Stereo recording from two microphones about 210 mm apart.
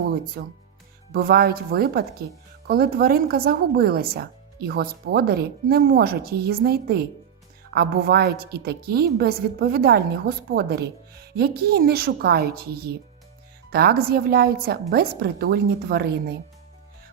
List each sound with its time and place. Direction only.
0.0 s a woman's voice: 45° right (ahead or behind)